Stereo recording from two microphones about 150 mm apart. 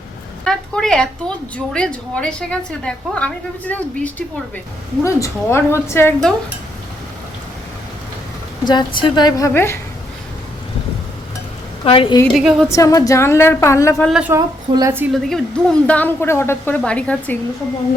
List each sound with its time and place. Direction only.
0.4 s a woman's voice: 5° left (ahead or behind)
8.6 s a woman's voice: 30° left (ahead or behind)
11.9 s a woman's voice: 35° left (ahead or behind)
12.3 s a woman's voice: centre (ahead or behind)
12.6 s a woman's voice: 20° left (ahead or behind)
14.1 s a woman's voice: 5° right (ahead or behind)
14.3 s a woman's voice: 20° right (ahead or behind)
15.1 s a woman's voice: centre (ahead or behind)